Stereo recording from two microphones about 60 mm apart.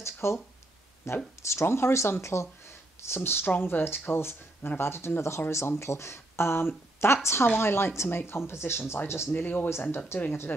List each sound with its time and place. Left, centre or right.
0.0 s a sound: left
1.0 s speech: left
9.3 s speech: left
9.7 s speech: left